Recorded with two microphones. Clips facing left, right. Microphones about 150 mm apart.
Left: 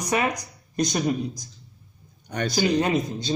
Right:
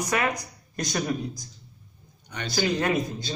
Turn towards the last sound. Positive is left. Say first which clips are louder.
# left 2 dB
turn(degrees=20)  # may be behind; listen again after turning